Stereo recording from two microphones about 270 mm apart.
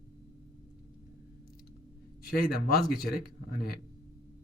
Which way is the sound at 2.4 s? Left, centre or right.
Left.